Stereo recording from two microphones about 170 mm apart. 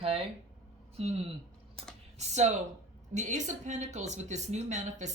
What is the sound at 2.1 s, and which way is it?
A woman's voice, 40° right (ahead or behind).